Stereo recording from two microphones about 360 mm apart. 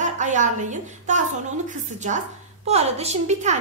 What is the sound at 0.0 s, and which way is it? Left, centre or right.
A woman's voice, centre.